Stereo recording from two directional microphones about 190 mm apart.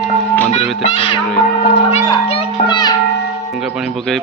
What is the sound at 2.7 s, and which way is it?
Speech, 20° left (ahead or behind).